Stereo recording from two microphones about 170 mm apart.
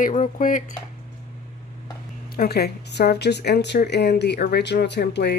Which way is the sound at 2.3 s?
65° left (ahead or behind).